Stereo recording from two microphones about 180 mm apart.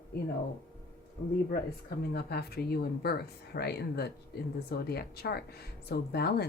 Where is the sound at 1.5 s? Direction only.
60° left (ahead or behind).